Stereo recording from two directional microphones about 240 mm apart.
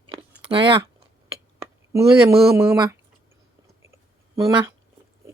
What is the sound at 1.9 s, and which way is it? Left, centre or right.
Speech, centre.